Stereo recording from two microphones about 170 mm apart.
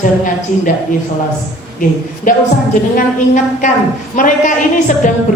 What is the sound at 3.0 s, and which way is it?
A woman's voice, 50° left (ahead or behind).